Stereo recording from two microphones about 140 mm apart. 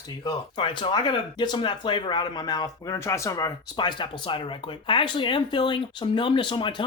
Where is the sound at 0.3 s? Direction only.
35° left (ahead or behind).